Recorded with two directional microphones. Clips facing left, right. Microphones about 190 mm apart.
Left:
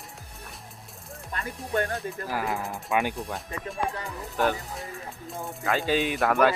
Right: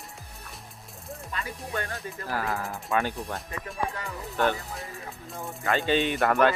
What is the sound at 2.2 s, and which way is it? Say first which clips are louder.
Speech: right 1 dB; 15° left (ahead or behind).